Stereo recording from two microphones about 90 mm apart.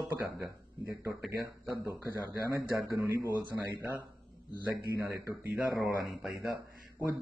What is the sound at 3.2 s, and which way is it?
A man's voice, 20° right (ahead or behind).